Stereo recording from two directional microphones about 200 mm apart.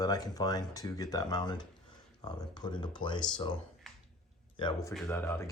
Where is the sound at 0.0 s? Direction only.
20° left (ahead or behind).